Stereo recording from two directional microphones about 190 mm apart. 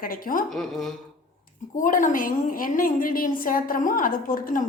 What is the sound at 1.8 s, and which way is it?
A woman's voice, 45° left (ahead or behind).